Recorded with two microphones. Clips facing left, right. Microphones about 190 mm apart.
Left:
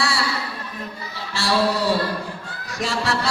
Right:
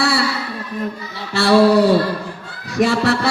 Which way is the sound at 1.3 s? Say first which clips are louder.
Right 9 dB; 60° right (ahead or behind).